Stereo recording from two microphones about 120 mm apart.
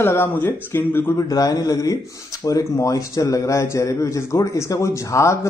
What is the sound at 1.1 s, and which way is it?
Speech, 30° left (ahead or behind).